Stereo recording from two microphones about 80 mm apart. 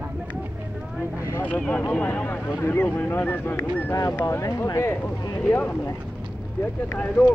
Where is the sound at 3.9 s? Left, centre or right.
Left.